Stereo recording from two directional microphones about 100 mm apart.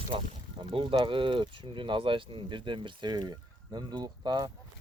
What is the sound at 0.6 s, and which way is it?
Speech, 60° right (ahead or behind).